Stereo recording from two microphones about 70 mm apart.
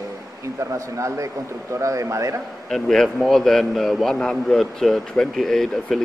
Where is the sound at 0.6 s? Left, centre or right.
Right.